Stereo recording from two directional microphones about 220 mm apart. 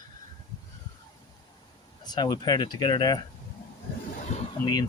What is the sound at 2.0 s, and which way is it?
Speech, 20° left (ahead or behind).